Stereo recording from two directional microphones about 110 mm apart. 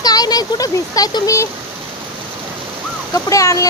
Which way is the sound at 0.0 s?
35° left (ahead or behind).